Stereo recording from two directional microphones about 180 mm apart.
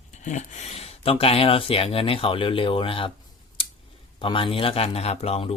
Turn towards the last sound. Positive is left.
turn(degrees=35)  # may be behind; listen again after turning